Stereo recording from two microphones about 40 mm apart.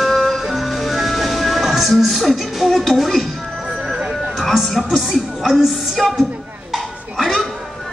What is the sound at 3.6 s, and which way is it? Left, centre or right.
Music, right.